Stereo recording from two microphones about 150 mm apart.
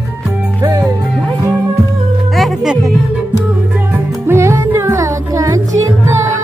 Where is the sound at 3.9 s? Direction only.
15° right (ahead or behind).